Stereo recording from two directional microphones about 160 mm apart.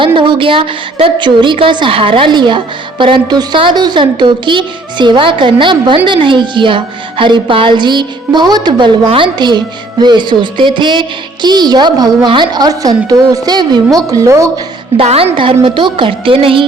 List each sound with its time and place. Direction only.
0.0 s a child's voice: 30° right (ahead or behind)
14.9 s a child's voice: 40° right (ahead or behind)